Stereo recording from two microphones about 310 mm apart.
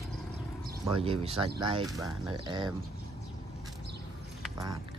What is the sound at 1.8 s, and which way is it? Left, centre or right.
Speech, centre.